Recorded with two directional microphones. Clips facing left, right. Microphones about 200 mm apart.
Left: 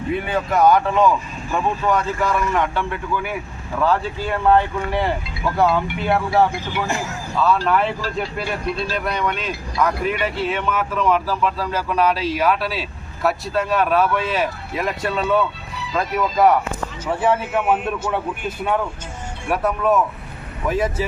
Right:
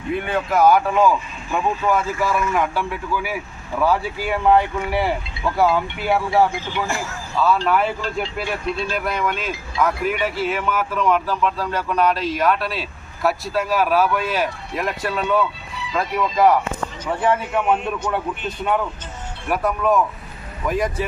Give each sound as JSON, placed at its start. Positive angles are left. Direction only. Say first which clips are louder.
{"t": 0.1, "sound": "speech", "louder": "even", "side_deg": 0}
{"t": 6.8, "sound": "speech", "louder": "left 1 dB", "side_deg": 20}
{"t": 7.3, "sound": "speech", "louder": "even", "side_deg": 0}